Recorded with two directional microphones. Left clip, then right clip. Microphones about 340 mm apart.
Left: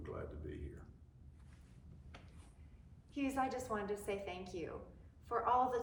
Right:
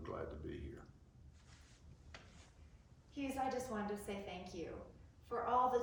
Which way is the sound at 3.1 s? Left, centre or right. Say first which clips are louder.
Left 2 dB; centre.